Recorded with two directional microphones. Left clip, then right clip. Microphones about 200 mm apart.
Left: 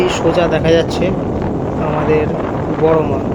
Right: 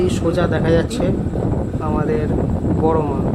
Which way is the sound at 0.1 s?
10° left (ahead or behind).